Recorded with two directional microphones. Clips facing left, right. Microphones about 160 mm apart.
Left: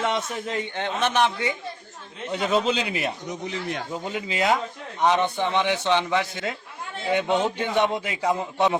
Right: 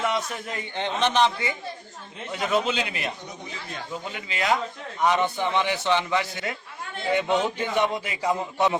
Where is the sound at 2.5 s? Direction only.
30° left (ahead or behind).